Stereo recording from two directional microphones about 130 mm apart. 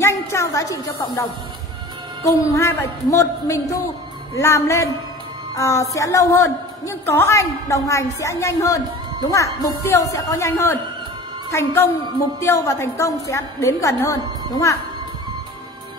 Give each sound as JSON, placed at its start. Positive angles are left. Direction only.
{"t": 0.0, "sound": "a woman's voice", "side_deg": 20}
{"t": 2.2, "sound": "a woman's voice", "side_deg": 20}